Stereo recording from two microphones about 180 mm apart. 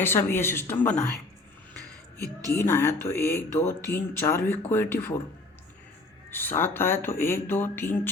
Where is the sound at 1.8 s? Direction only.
20° right (ahead or behind).